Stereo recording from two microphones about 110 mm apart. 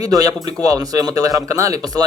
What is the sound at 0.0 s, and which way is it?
A man's voice, 35° right (ahead or behind).